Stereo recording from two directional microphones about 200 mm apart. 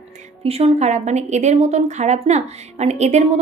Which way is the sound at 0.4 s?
30° right (ahead or behind).